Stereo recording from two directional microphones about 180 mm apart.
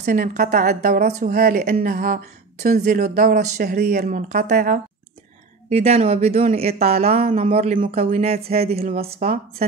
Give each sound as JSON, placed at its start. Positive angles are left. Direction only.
{"t": 0.0, "sound": "a woman's voice", "side_deg": -45}
{"t": 3.7, "sound": "speech", "side_deg": -60}
{"t": 4.1, "sound": "a woman's voice", "side_deg": -45}
{"t": 5.7, "sound": "speech", "side_deg": -35}